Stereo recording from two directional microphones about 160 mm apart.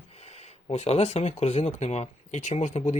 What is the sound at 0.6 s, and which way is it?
Speech, 40° left (ahead or behind).